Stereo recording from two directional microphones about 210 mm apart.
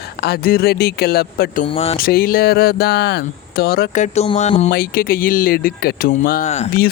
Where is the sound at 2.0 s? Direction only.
45° left (ahead or behind).